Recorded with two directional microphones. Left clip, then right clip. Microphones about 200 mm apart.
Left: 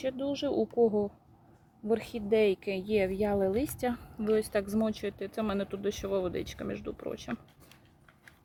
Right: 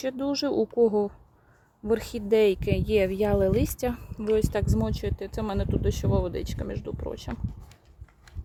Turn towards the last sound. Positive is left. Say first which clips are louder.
# right 3 dB
turn(degrees=-15)  # may be behind; listen again after turning